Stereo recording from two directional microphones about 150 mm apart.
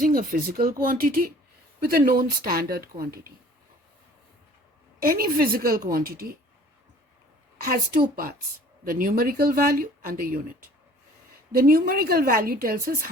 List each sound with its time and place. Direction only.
0.0 s speech: 70° right (ahead or behind)
4.9 s speech: 80° right
8.1 s speech: 85° right
8.8 s speech: 70° right (ahead or behind)
11.5 s speech: 85° right